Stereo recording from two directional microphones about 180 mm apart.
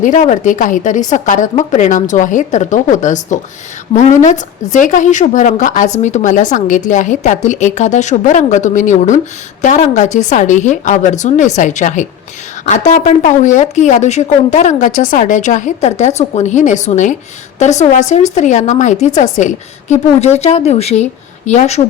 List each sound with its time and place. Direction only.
0.0 s a woman's voice: 45° left (ahead or behind)